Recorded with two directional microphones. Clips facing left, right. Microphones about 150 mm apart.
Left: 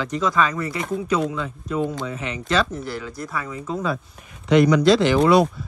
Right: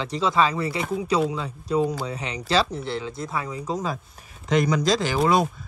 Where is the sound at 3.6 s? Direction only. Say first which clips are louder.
Left 5 dB; 40° right (ahead or behind).